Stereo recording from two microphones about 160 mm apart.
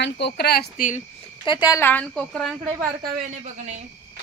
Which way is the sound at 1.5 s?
25° left (ahead or behind).